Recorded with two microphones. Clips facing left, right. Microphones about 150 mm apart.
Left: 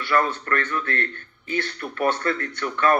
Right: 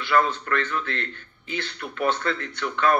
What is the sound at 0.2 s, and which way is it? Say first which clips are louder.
Speech: even; 50° left (ahead or behind).